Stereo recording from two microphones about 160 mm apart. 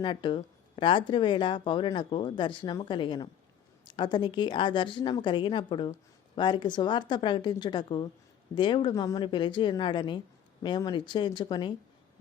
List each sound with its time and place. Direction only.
0.0 s a woman's voice: 30° left (ahead or behind)